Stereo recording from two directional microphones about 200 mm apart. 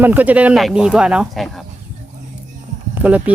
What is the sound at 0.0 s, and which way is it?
Speech, 10° right (ahead or behind).